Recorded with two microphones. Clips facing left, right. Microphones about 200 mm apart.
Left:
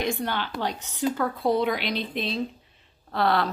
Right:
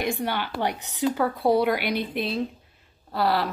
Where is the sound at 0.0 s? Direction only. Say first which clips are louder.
Right 1 dB; 10° right (ahead or behind).